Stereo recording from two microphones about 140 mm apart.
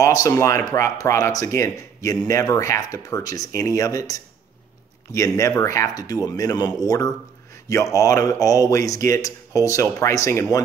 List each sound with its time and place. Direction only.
0.0 s speech: 25° left (ahead or behind)